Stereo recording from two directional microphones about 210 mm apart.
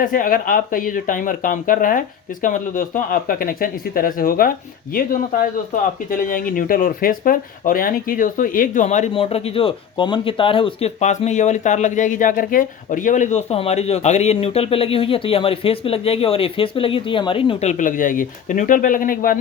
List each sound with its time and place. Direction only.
0.0 s speech: 40° left (ahead or behind)